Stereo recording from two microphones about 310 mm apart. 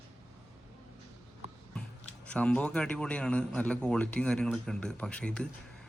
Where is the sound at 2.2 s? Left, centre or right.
Centre.